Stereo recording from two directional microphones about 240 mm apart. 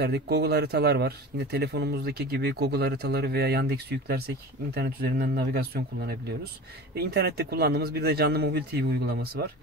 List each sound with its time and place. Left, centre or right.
0.0 s speech: right